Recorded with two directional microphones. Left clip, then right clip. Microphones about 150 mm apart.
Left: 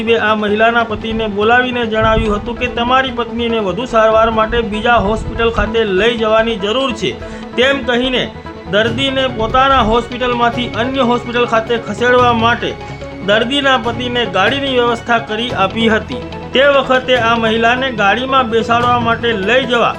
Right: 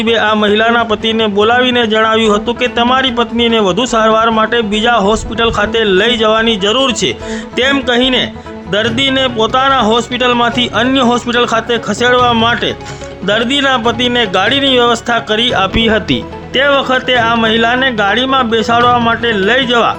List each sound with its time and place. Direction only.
0.0 s a man's voice: 45° right (ahead or behind)
16.6 s speech: 35° right (ahead or behind)